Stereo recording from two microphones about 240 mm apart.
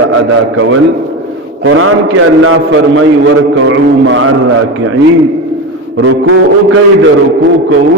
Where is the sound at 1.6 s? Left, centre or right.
Right.